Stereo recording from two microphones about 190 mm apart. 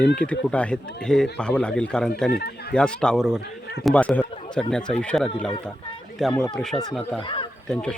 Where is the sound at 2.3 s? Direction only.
55° left (ahead or behind).